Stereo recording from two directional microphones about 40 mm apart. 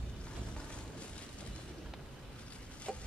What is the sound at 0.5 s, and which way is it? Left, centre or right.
Boat, left.